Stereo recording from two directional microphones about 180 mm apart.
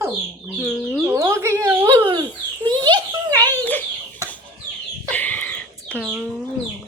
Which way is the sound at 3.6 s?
10° left (ahead or behind).